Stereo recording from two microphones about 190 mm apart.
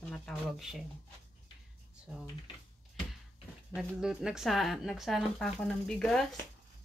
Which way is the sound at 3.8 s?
5° right (ahead or behind).